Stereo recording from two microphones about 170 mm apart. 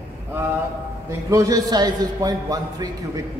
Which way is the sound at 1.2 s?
20° right (ahead or behind).